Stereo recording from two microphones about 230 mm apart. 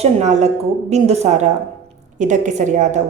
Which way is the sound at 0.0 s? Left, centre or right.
Right.